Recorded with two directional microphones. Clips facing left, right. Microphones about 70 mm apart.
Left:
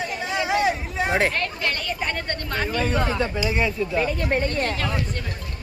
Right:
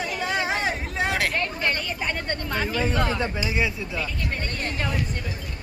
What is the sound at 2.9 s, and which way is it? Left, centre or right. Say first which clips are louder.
Speech: left 1 dB; centre.